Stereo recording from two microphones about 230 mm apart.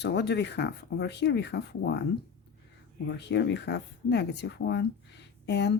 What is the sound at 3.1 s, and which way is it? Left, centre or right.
Speech, left.